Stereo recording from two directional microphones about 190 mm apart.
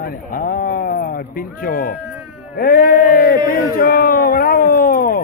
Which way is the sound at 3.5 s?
50° left (ahead or behind).